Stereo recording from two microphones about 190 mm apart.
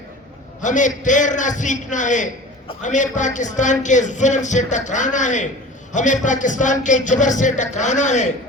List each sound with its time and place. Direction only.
0.6 s a man's voice: 40° left (ahead or behind)